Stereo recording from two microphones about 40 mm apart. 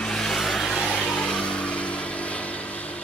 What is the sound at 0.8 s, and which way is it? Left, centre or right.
Vehicle, left.